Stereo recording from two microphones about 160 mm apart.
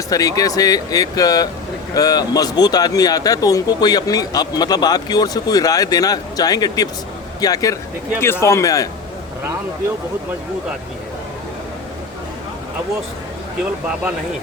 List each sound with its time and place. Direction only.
0.1 s speech: 20° left (ahead or behind)